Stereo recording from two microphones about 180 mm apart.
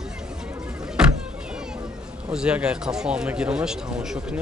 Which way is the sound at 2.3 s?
5° right (ahead or behind).